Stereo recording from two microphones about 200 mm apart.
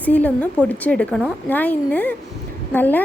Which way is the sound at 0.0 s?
10° left (ahead or behind).